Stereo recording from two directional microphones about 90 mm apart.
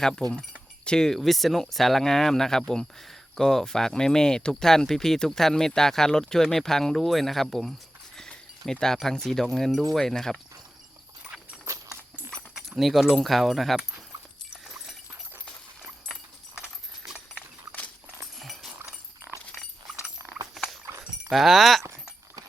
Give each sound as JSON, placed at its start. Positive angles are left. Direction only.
{"t": 0.0, "sound": "speech", "side_deg": 5}
{"t": 11.6, "sound": "a sound", "side_deg": -35}
{"t": 12.5, "sound": "speech", "side_deg": -5}
{"t": 17.1, "sound": "clip-clop", "side_deg": -10}
{"t": 18.3, "sound": "dog", "side_deg": 0}
{"t": 20.6, "sound": "a sound", "side_deg": 0}
{"t": 21.0, "sound": "speech", "side_deg": -5}